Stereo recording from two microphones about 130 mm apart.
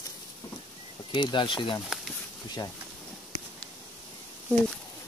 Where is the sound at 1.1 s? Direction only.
40° left (ahead or behind).